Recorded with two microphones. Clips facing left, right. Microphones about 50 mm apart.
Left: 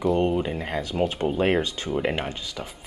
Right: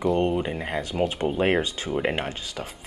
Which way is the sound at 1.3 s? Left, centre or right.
Centre.